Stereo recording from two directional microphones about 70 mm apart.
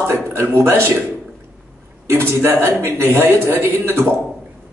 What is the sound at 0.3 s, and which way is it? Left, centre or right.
Speech, right.